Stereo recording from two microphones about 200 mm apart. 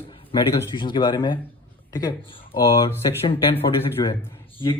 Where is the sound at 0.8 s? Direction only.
25° left (ahead or behind).